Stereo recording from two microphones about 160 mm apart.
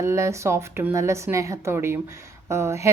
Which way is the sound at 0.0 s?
15° right (ahead or behind).